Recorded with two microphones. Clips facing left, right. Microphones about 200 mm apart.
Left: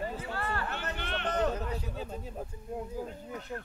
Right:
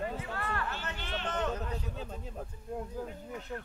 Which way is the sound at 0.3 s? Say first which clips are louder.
Left 2 dB; 30° left (ahead or behind).